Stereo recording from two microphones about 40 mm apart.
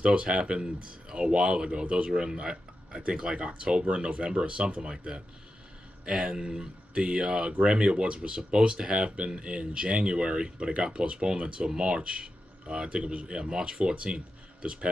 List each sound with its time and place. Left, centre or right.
0.0 s speech: right